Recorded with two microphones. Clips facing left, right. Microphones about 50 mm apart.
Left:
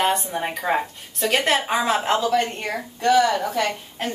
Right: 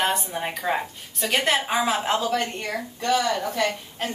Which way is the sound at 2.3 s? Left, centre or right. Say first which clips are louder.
Left 4 dB; left.